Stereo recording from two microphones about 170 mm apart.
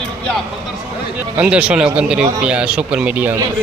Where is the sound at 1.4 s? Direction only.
5° right (ahead or behind).